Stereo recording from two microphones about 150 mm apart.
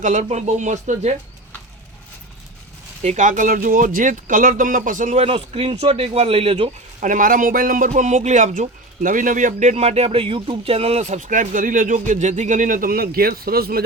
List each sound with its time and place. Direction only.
0.0 s speech: 55° right (ahead or behind)
3.0 s a man's voice: 50° right (ahead or behind)
7.0 s a man's voice: 60° right (ahead or behind); by 13.8 s 90° right